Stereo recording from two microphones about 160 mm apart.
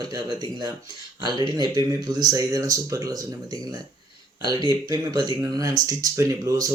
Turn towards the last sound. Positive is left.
turn(degrees=-20)  # may be behind; listen again after turning